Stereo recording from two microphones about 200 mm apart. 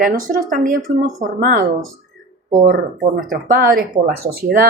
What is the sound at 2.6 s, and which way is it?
Speech, 45° right (ahead or behind).